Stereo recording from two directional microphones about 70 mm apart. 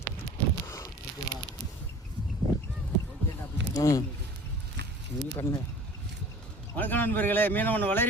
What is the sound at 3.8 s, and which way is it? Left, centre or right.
Speech, left.